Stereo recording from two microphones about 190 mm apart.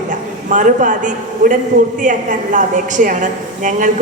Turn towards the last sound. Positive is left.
turn(degrees=-40)  # may be behind; listen again after turning